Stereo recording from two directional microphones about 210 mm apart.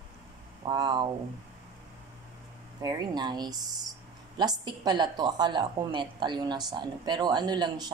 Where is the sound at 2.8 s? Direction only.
20° right (ahead or behind).